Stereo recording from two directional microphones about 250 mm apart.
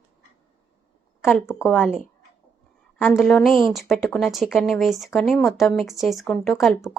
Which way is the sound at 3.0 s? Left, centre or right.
Centre.